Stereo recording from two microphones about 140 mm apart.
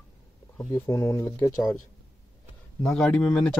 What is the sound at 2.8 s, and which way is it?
Speech, 5° left (ahead or behind).